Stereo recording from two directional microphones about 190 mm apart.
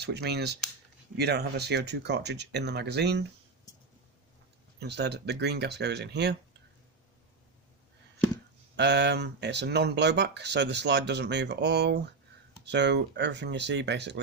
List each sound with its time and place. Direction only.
0.0 s speech: 60° right (ahead or behind)
4.8 s speech: 60° right (ahead or behind)
8.7 s speech: 65° right (ahead or behind)